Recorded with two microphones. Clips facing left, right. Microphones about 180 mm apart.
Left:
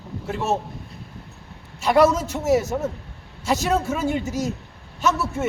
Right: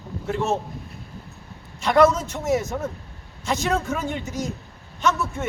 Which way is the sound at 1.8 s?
5° left (ahead or behind).